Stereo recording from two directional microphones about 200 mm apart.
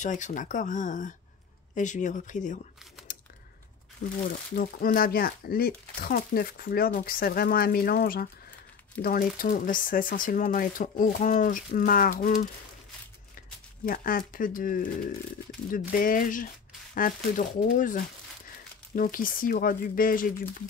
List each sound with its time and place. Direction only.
0.0 s speech: 40° left (ahead or behind)
4.6 s speech: 45° left (ahead or behind)
13.8 s speech: 45° left (ahead or behind)